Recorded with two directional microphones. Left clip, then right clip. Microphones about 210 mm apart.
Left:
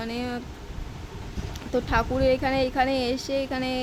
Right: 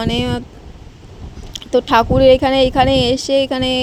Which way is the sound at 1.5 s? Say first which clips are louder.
Right 12 dB; 30° right (ahead or behind).